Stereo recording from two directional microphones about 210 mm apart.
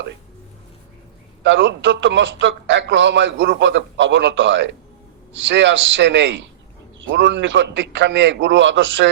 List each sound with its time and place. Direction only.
1.5 s a man's voice: 60° right (ahead or behind)